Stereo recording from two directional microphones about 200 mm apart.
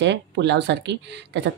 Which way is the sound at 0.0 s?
60° right (ahead or behind).